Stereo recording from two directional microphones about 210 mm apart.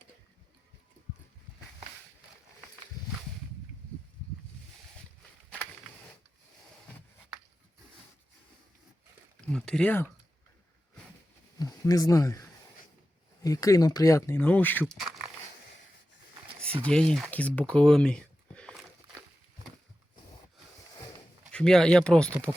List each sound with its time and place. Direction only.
3.0 s a sound: 20° left (ahead or behind)
9.4 s speech: 5° left (ahead or behind)
11.6 s speech: 15° left (ahead or behind); by 15.1 s centre (ahead or behind)
16.8 s speech: 5° left (ahead or behind)
21.5 s speech: 5° left (ahead or behind)